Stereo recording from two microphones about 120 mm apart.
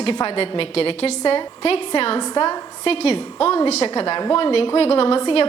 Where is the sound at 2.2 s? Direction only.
40° left (ahead or behind).